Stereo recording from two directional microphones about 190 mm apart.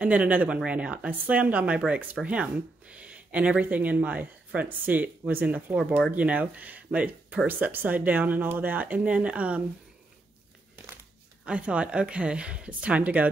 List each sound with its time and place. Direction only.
0.0 s speech: 5° right (ahead or behind)
11.4 s speech: 5° right (ahead or behind)